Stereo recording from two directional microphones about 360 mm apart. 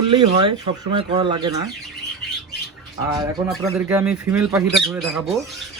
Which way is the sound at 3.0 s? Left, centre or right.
Centre.